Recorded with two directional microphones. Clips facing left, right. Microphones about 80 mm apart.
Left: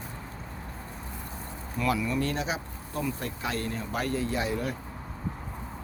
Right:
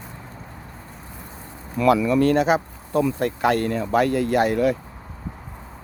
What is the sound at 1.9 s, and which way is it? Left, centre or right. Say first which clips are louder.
Speech: right 12 dB; right.